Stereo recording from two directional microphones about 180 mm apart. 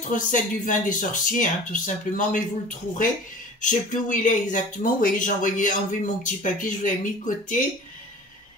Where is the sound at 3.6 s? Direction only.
45° left (ahead or behind).